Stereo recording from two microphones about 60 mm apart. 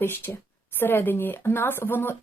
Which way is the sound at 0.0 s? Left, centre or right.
Left.